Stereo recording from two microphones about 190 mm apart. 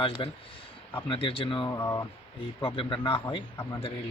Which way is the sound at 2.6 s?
25° left (ahead or behind).